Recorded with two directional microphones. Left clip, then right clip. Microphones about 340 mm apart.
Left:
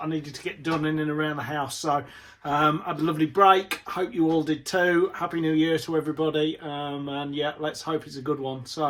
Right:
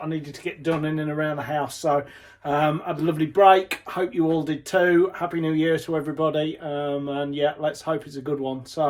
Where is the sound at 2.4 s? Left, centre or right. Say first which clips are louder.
Right 1 dB; centre.